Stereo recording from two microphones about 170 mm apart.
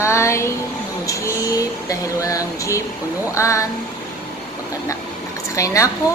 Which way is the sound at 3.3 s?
15° left (ahead or behind).